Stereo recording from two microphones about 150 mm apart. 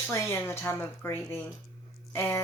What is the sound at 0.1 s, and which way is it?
Speech, 15° left (ahead or behind).